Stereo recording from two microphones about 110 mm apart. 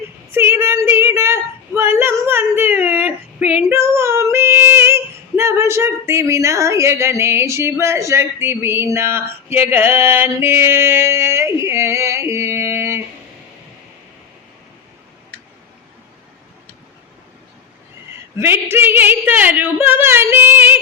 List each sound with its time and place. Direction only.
0.3 s a sound: 20° right (ahead or behind)
3.7 s female singing: 25° right (ahead or behind)
18.3 s a woman's voice: 20° right (ahead or behind)